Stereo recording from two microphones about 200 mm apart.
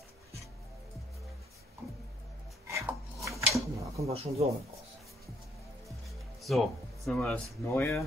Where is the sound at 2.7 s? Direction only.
15° right (ahead or behind).